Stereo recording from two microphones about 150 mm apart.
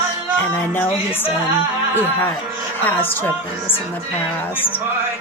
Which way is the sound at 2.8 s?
15° left (ahead or behind).